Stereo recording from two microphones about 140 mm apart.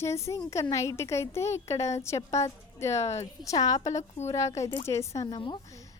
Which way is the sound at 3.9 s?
55° left (ahead or behind).